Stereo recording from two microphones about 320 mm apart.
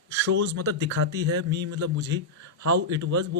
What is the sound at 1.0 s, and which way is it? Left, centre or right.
Speech, right.